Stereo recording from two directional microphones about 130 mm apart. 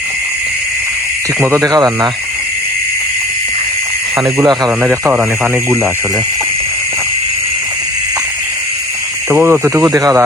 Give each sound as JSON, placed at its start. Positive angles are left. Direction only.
{"t": 1.5, "sound": "speech", "side_deg": -25}
{"t": 4.4, "sound": "speech", "side_deg": -30}
{"t": 4.8, "sound": "speech", "side_deg": -10}
{"t": 9.3, "sound": "speech", "side_deg": -20}